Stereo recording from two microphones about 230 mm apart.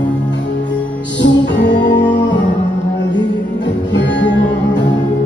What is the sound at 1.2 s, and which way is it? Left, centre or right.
Music, left.